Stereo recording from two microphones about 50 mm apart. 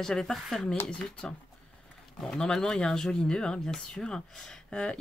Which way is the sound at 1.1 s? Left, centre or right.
Centre.